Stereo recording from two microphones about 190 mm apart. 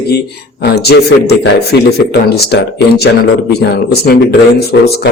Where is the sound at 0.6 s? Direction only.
60° left (ahead or behind).